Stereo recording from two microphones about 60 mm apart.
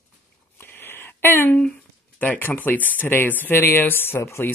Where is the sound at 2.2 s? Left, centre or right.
Left.